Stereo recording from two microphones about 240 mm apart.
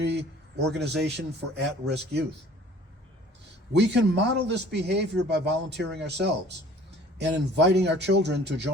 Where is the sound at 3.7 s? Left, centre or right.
Right.